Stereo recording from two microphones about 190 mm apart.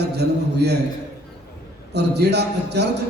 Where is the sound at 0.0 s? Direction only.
60° right (ahead or behind).